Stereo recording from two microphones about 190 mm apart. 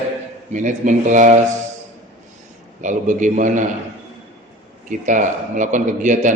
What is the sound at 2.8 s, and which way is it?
Speech, 40° right (ahead or behind).